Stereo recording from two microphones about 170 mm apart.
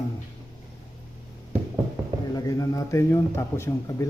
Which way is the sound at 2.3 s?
20° left (ahead or behind).